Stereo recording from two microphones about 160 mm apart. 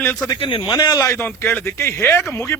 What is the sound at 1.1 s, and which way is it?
Speech, 15° left (ahead or behind).